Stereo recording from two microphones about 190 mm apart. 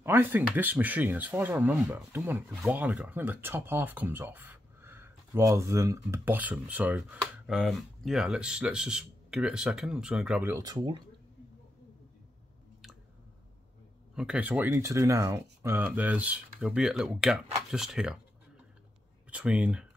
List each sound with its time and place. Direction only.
0.0 s speech: 10° right (ahead or behind)
10.5 s speech: 20° right (ahead or behind)
14.1 s speech: 5° right (ahead or behind)
19.3 s speech: 5° right (ahead or behind)